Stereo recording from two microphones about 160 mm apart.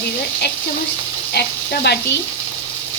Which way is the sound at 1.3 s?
80° left.